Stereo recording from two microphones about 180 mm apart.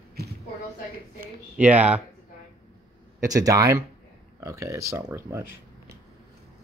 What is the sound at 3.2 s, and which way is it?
Speech, 20° right (ahead or behind).